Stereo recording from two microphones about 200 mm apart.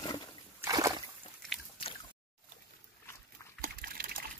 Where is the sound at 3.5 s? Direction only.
50° right (ahead or behind).